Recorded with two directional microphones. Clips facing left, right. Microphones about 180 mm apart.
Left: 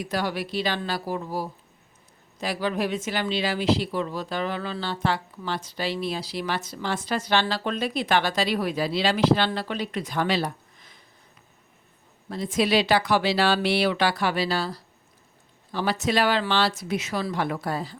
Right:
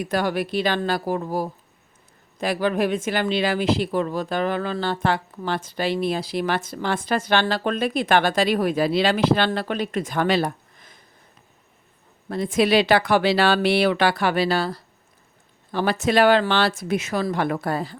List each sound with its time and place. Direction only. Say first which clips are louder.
0.0 s speech: right 5 dB; 50° right (ahead or behind)
12.3 s speech: right 4 dB; 55° right (ahead or behind)